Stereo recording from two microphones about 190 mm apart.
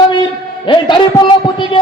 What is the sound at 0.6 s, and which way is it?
A man's voice, 25° left (ahead or behind).